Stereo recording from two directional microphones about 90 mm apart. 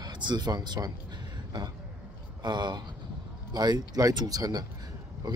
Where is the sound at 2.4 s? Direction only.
55° right (ahead or behind).